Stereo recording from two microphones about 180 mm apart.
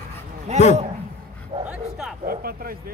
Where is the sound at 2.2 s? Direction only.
55° right (ahead or behind).